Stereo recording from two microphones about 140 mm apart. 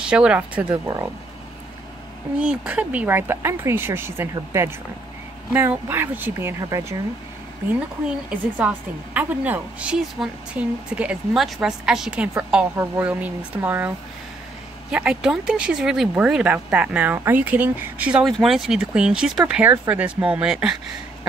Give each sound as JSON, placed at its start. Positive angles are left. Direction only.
{"t": 0.0, "sound": "a woman's voice", "side_deg": -5}
{"t": 0.7, "sound": "speech", "side_deg": -25}
{"t": 2.3, "sound": "a woman's voice", "side_deg": -5}
{"t": 8.3, "sound": "a woman's voice", "side_deg": -10}